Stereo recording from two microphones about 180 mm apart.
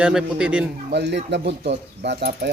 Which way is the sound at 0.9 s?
70° right (ahead or behind).